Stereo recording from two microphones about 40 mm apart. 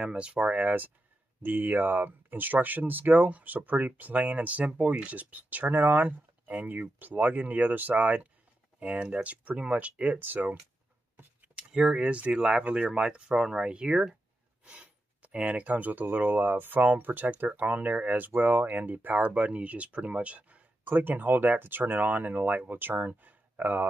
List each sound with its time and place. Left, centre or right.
0.0 s speech: right
1.4 s speech: right
10.1 s speech: right
11.5 s speech: right
20.9 s speech: right